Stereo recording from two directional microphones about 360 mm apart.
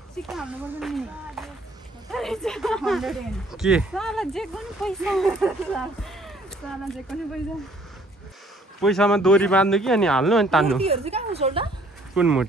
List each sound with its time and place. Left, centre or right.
0.3 s speech: centre
8.8 s speech: centre
10.8 s a woman's voice: centre
12.2 s speech: centre